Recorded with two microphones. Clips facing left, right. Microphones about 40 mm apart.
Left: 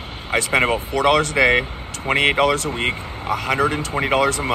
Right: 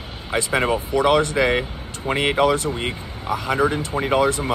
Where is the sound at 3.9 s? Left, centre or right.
Left.